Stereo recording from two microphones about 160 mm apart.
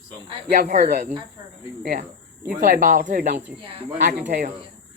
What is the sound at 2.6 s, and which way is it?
Speech, 65° right (ahead or behind).